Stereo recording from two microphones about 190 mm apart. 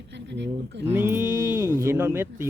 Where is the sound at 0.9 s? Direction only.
15° right (ahead or behind).